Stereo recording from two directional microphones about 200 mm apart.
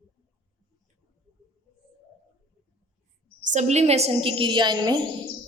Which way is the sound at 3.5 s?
35° right (ahead or behind).